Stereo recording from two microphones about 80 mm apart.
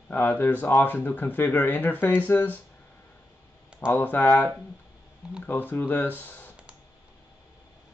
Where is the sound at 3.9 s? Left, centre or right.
Left.